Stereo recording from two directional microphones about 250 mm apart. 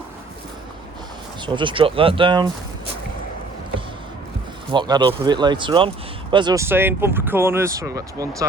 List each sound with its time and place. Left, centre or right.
1.5 s speech: centre
4.7 s speech: centre